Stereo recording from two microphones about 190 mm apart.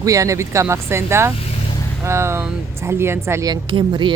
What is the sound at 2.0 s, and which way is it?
Speech, 15° right (ahead or behind).